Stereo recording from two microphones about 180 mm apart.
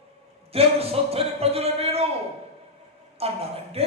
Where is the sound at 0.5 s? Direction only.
35° right (ahead or behind).